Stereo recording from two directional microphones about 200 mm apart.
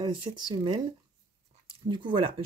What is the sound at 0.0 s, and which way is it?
Speech, 25° right (ahead or behind).